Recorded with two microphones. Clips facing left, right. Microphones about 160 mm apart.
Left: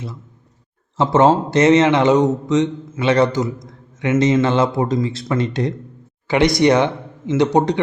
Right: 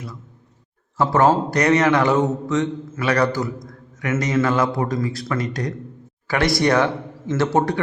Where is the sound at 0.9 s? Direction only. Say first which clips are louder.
Left 3 dB; 20° left (ahead or behind).